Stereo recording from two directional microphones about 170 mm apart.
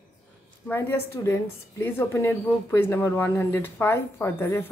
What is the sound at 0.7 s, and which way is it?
A woman's voice, 15° left (ahead or behind).